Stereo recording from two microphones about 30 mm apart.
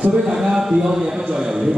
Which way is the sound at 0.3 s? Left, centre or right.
Centre.